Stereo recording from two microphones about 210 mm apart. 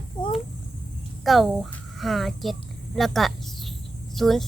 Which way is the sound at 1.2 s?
Centre (ahead or behind).